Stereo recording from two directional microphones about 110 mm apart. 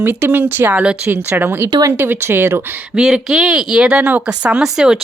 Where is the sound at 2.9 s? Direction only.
5° right (ahead or behind).